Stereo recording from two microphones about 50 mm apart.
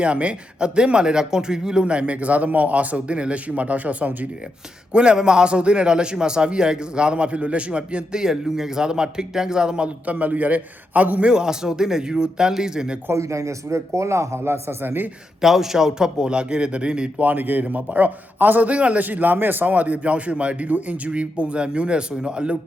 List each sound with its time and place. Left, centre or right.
0.0 s speech: right
4.9 s a man's voice: centre
10.1 s a man's voice: right
11.3 s a man's voice: centre
13.1 s speech: right
15.4 s a man's voice: centre
17.2 s a man's voice: right
19.0 s speech: right; by 22.5 s centre